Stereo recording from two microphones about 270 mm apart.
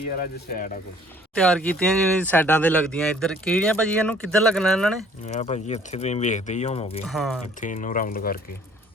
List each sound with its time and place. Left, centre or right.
0.1 s speech: left
1.4 s speech: centre
5.2 s speech: left
7.1 s speech: centre
7.6 s speech: left